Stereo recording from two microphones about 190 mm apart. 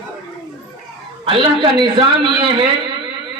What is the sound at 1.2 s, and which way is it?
Speech, 25° right (ahead or behind).